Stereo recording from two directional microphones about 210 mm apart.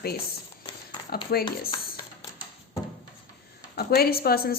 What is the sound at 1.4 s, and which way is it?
Speech, 20° left (ahead or behind).